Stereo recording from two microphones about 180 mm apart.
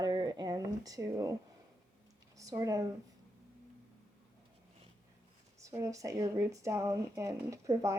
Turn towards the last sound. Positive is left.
turn(degrees=-15)  # may be behind; listen again after turning